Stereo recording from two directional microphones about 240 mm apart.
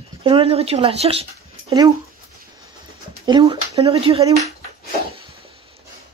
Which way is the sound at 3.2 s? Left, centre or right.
Centre.